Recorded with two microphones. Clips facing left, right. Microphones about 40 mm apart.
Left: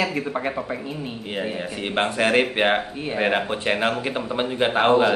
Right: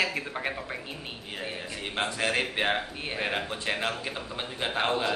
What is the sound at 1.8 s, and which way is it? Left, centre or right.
Speech, left.